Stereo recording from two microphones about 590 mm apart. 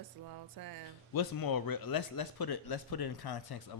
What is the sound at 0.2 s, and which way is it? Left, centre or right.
Speech, right.